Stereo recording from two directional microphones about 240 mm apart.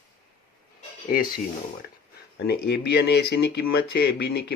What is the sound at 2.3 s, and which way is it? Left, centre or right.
Speech, left.